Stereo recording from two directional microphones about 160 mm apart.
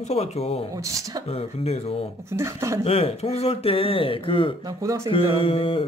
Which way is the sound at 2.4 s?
15° right (ahead or behind).